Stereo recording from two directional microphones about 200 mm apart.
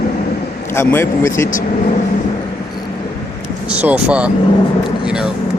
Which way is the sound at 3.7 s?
5° right (ahead or behind).